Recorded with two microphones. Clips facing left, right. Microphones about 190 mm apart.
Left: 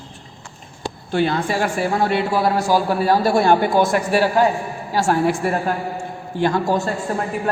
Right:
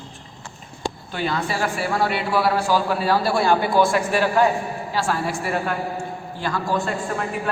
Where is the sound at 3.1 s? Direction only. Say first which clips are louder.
Left 4 dB; 45° left (ahead or behind).